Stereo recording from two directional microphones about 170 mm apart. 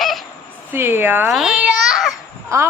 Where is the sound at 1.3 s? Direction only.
Centre (ahead or behind).